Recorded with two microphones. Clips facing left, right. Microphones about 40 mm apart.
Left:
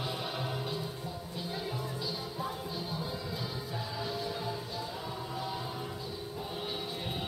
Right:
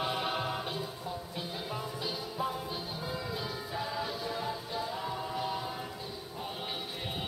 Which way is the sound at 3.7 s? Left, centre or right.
Right.